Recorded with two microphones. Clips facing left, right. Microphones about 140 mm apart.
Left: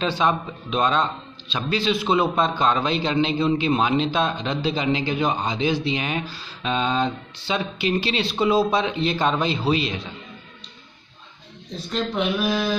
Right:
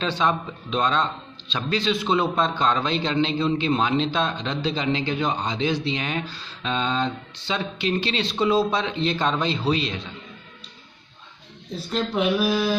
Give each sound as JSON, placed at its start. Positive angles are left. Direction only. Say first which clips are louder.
{"t": 0.0, "sound": "a man's voice", "louder": "left 2 dB", "side_deg": 10}
{"t": 11.7, "sound": "speech", "louder": "right 1 dB", "side_deg": -5}